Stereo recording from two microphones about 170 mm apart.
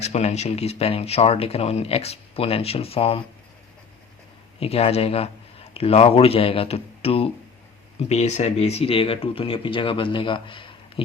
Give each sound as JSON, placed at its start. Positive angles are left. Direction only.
{"t": 0.0, "sound": "speech", "side_deg": 40}
{"t": 4.6, "sound": "speech", "side_deg": 35}